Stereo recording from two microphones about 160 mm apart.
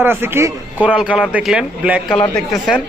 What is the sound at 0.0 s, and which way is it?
A man's voice, 15° right (ahead or behind).